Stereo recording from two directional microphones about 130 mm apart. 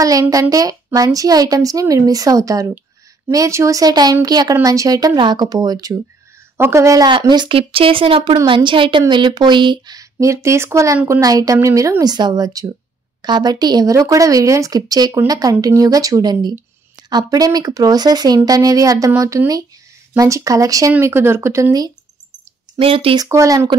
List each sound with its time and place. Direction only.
0.0 s speech: 25° right (ahead or behind)
7.1 s speech: 35° right (ahead or behind)
22.8 s speech: 45° right (ahead or behind)
23.1 s speech: 25° right (ahead or behind)